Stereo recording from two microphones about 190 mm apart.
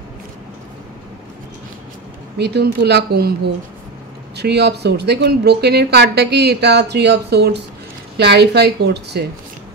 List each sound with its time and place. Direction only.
2.3 s speech: 60° right (ahead or behind)